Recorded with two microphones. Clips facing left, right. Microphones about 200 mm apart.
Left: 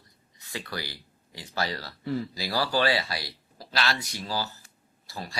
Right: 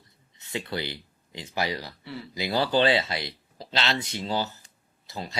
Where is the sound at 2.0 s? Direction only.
45° left (ahead or behind).